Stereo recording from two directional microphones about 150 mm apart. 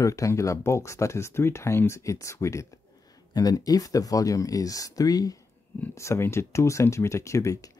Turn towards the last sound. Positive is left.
turn(degrees=20)  # may be behind; listen again after turning